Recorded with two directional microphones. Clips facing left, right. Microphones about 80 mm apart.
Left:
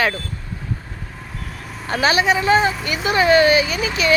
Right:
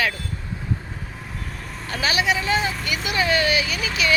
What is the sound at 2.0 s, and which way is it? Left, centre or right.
Speech, left.